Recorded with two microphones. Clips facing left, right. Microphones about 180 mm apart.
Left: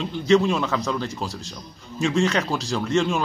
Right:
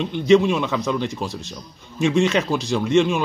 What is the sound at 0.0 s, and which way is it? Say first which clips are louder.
Speech: right 3 dB; 20° right (ahead or behind).